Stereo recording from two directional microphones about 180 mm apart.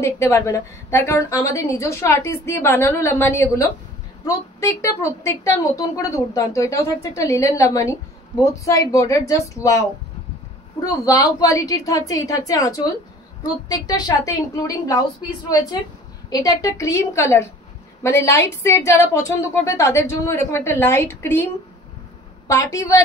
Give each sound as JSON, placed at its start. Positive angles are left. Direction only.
{"t": 0.0, "sound": "a woman's voice", "side_deg": 15}
{"t": 22.5, "sound": "a woman's voice", "side_deg": 15}